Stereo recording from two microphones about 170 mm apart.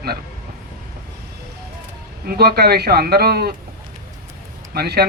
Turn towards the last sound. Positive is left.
turn(degrees=-70)  # may be behind; listen again after turning